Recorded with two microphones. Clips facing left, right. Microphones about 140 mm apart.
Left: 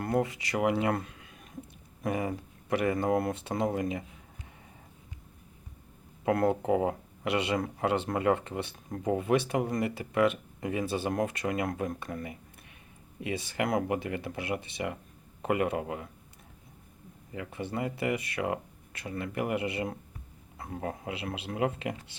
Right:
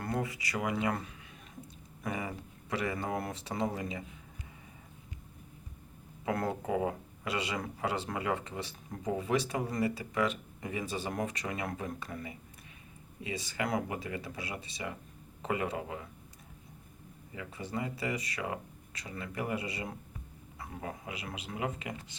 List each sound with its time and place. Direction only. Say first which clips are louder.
0.6 s speech: left 5 dB; 60° left (ahead or behind)
2.0 s speech: left 6 dB; 55° left (ahead or behind)
6.4 s speech: left 8 dB; 25° left (ahead or behind)
6.7 s speech: left 5 dB; 50° left (ahead or behind)
17.3 s a man's voice: left 4 dB; 60° left (ahead or behind)
21.1 s speech: left 5 dB; 65° left (ahead or behind)